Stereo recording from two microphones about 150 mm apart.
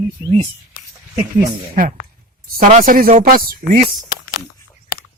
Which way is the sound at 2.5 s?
60° right (ahead or behind).